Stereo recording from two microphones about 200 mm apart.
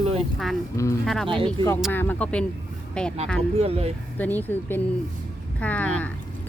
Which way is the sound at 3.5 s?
30° right (ahead or behind).